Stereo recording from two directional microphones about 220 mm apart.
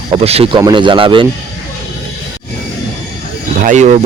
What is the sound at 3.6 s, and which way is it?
Speech, 35° right (ahead or behind).